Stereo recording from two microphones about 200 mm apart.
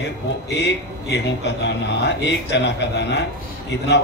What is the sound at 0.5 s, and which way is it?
A man's voice, 60° left (ahead or behind).